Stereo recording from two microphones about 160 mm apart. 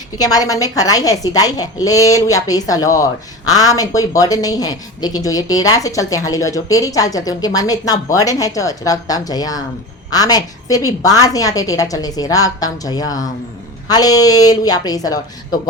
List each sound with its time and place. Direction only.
0.2 s a woman's voice: 25° left (ahead or behind)